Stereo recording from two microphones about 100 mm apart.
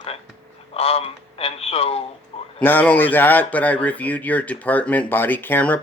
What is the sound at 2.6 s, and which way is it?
Speech, 15° left (ahead or behind).